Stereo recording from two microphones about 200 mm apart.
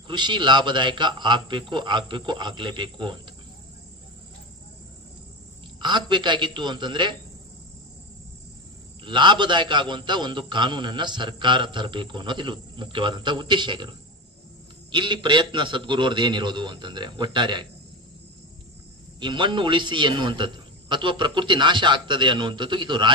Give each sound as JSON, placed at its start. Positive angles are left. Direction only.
{"t": 0.1, "sound": "a man's voice", "side_deg": -25}
{"t": 5.8, "sound": "a man's voice", "side_deg": -25}
{"t": 9.0, "sound": "a man's voice", "side_deg": -25}
{"t": 14.9, "sound": "a man's voice", "side_deg": -25}
{"t": 19.1, "sound": "a man's voice", "side_deg": -25}